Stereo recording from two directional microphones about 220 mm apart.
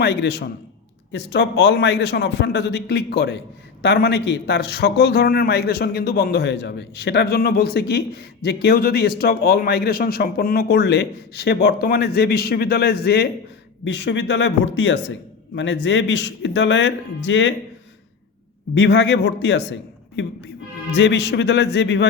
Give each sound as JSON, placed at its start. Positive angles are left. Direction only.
{"t": 0.0, "sound": "a man's voice", "side_deg": 50}
{"t": 18.7, "sound": "a man's voice", "side_deg": 55}